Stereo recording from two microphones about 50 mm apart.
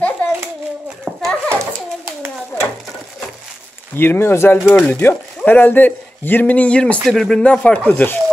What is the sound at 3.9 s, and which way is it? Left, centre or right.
Speech, left.